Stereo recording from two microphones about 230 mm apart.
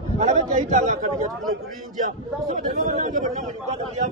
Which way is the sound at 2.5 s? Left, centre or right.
Right.